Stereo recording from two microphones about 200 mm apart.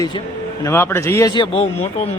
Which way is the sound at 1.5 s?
30° left (ahead or behind).